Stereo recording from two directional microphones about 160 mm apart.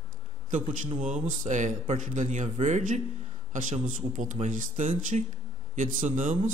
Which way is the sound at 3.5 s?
55° right (ahead or behind).